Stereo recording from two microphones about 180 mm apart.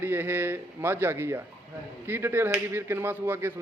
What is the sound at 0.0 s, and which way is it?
A man's voice, 10° right (ahead or behind).